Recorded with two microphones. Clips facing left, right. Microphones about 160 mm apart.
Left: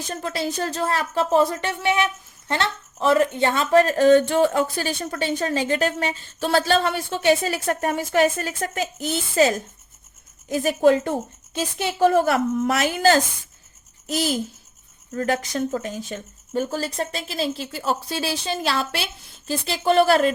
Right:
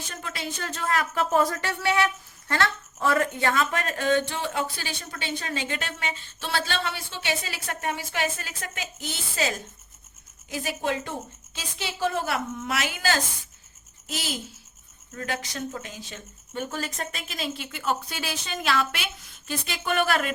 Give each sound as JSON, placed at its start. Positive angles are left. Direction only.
{"t": 0.0, "sound": "a woman's voice", "side_deg": 35}